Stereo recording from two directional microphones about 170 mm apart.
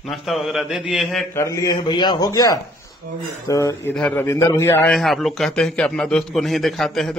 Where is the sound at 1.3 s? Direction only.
20° left (ahead or behind).